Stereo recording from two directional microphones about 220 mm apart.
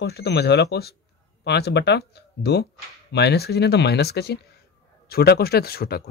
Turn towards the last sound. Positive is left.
turn(degrees=45)  # may be behind; listen again after turning